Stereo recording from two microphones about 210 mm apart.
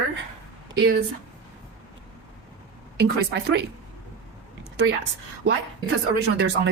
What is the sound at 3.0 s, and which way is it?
Speech, 55° right (ahead or behind).